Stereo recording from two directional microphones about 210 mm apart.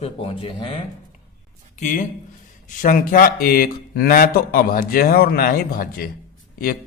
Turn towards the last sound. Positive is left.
turn(degrees=45)  # may be behind; listen again after turning